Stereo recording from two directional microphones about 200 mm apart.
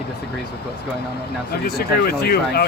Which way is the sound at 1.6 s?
50° left (ahead or behind).